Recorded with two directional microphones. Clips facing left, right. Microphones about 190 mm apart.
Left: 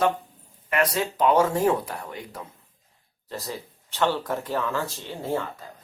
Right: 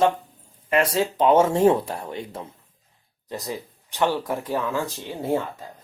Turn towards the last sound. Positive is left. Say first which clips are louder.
# right 3 dB
turn(degrees=-15)  # may be behind; listen again after turning